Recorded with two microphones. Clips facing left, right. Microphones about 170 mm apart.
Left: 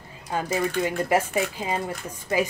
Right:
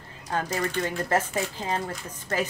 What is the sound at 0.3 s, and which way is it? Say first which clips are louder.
Speech: left 2 dB; 10° left (ahead or behind).